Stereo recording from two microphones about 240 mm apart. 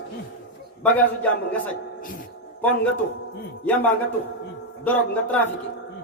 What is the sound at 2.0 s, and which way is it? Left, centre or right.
Speech, left.